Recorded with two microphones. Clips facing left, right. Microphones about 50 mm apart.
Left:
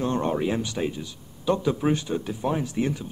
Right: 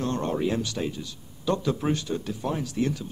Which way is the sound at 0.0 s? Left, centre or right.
Centre.